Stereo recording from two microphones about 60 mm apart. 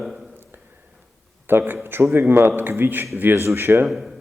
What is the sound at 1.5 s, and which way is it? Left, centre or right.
A man's voice, right.